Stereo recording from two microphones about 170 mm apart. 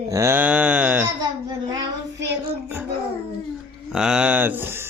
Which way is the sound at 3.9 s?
5° right (ahead or behind).